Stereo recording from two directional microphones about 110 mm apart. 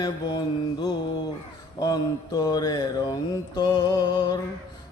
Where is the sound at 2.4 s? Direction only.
35° left (ahead or behind).